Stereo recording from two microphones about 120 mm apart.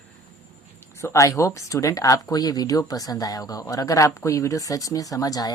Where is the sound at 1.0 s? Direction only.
25° left (ahead or behind).